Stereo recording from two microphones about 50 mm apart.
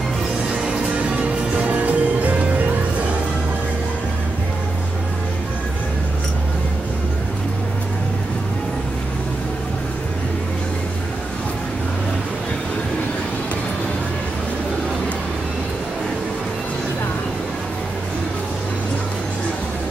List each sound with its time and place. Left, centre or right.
0.7 s music: right